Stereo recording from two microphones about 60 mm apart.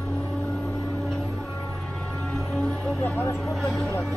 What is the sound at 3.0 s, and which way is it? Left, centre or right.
Vehicle, left.